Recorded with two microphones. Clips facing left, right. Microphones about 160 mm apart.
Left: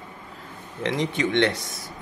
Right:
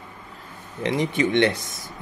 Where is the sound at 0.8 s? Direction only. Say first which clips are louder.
Right 2 dB; 10° right (ahead or behind).